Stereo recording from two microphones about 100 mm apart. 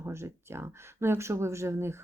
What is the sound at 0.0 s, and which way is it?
Speech, 25° right (ahead or behind).